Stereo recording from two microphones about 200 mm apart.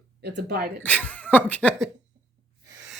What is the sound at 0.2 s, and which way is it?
Speech, 55° right (ahead or behind).